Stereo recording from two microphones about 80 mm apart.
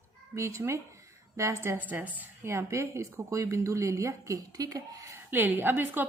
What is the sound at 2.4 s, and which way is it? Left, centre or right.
A woman's voice, right.